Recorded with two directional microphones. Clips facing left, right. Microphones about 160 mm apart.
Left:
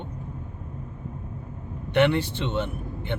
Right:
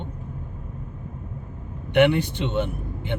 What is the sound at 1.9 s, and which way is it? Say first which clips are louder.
Speech: right 3 dB; 15° right (ahead or behind).